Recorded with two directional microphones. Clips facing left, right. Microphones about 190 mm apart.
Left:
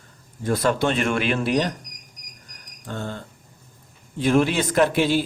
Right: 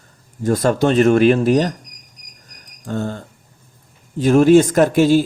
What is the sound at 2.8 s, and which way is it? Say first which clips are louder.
A man's voice: right 7 dB; 45° right (ahead or behind).